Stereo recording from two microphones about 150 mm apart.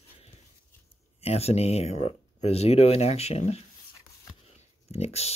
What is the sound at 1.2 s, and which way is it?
Speech, 45° left (ahead or behind).